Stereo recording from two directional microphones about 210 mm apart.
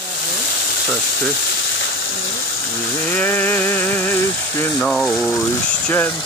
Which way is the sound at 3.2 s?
10° left (ahead or behind).